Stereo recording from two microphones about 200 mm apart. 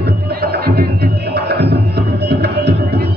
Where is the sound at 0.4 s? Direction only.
50° right (ahead or behind).